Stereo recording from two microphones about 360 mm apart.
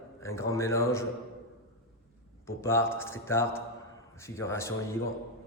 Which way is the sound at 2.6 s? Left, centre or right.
Centre.